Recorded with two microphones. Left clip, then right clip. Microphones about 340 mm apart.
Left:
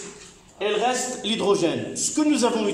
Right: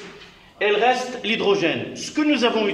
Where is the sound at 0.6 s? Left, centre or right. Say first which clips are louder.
Right 4 dB; centre.